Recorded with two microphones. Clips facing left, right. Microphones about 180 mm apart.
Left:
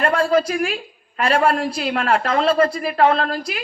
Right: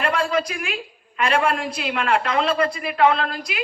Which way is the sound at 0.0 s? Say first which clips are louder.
Left 5 dB; 40° left (ahead or behind).